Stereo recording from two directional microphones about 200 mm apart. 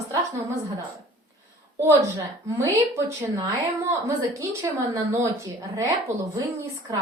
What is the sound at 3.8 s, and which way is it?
A woman's voice, 15° right (ahead or behind).